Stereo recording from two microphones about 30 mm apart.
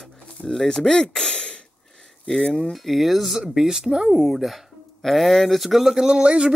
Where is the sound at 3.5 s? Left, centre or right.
Centre.